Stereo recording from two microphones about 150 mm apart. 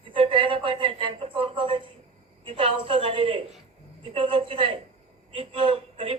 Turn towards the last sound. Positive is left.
turn(degrees=-40)  # may be behind; listen again after turning